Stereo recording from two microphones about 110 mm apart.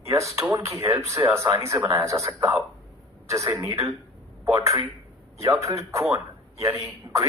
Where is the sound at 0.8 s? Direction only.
30° right (ahead or behind).